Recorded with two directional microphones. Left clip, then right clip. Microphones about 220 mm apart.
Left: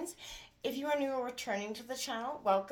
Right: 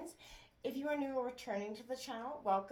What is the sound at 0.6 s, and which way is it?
A woman's voice, 35° left (ahead or behind).